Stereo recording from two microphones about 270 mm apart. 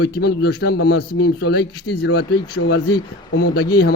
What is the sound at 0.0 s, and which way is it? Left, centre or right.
A man's voice, left.